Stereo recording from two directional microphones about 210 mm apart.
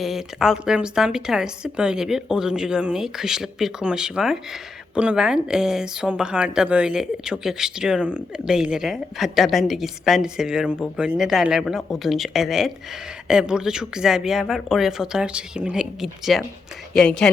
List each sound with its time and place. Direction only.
0.0 s speech: centre (ahead or behind)